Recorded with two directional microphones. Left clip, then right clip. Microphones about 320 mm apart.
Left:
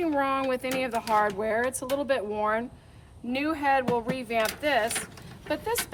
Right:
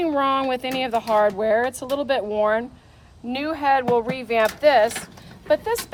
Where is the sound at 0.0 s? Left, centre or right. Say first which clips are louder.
Right 6 dB; centre.